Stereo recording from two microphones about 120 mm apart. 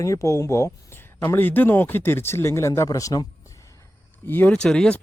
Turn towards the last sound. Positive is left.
turn(degrees=5)  # may be behind; listen again after turning